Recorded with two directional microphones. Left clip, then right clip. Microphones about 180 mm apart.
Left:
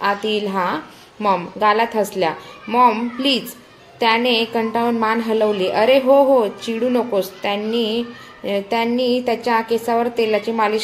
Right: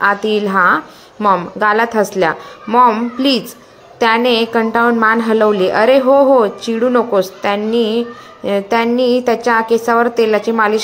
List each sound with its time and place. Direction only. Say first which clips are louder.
0.0 s a woman's voice: right 6 dB; 20° right (ahead or behind)